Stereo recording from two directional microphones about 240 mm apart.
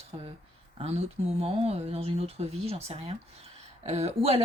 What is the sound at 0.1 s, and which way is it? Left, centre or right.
Speech, right.